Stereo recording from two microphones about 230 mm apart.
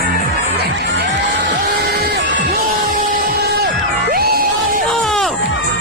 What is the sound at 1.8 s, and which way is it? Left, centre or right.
Music, right.